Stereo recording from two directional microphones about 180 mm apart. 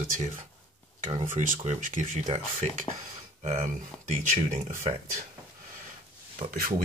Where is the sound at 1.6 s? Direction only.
40° right (ahead or behind).